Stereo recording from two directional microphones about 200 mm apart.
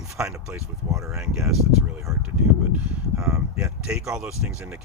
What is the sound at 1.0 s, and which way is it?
Speech, 15° right (ahead or behind).